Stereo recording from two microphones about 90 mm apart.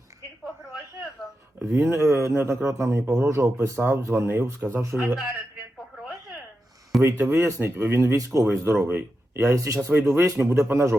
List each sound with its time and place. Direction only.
1.7 s a man's voice: 30° right (ahead or behind)
7.0 s speech: 25° right (ahead or behind)